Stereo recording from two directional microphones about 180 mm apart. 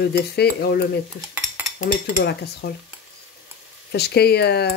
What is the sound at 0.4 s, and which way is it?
Speech, 60° left (ahead or behind).